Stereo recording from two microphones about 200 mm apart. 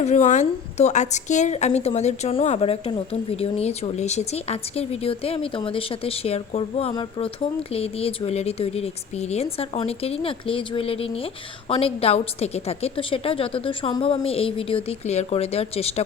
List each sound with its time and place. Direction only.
0.0 s a woman's voice: 35° left (ahead or behind)